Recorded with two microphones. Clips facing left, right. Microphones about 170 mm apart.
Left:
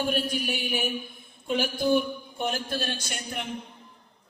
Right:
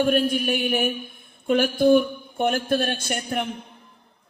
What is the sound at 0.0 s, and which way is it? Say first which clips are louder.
A man's voice: right 7 dB; 55° right (ahead or behind).